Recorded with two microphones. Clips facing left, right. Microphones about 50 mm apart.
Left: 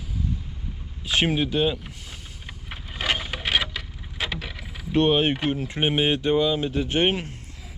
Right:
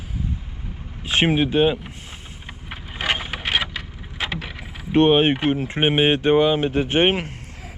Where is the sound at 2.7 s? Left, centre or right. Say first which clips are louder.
Right 2 dB; centre.